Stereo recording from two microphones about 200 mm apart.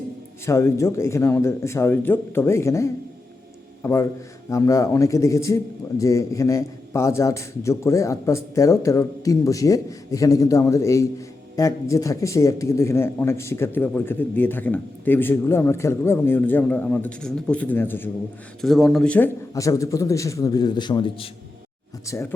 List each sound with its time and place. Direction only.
0.4 s a man's voice: 15° left (ahead or behind)